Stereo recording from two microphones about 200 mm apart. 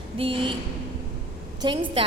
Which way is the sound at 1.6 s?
25° right (ahead or behind).